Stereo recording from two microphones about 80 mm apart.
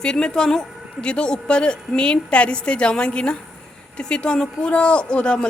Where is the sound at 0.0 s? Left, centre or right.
Centre.